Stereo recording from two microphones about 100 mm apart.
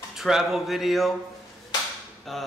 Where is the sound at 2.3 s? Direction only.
Centre (ahead or behind).